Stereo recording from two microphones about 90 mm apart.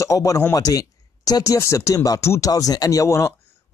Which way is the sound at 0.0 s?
40° left (ahead or behind).